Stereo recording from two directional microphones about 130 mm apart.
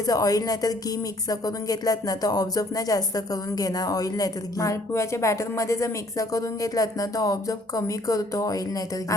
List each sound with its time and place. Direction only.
0.0 s speech: 30° left (ahead or behind)